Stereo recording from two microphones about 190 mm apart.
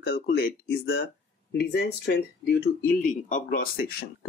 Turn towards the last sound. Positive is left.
turn(degrees=50)  # may be behind; listen again after turning